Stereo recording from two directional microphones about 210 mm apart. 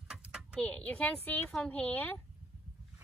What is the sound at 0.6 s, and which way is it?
A woman's voice, 5° left (ahead or behind).